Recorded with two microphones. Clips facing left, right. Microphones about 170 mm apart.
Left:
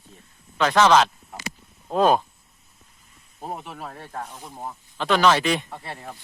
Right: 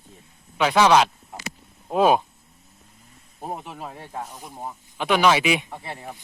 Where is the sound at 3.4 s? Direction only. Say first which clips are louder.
Right 1 dB; 10° right (ahead or behind).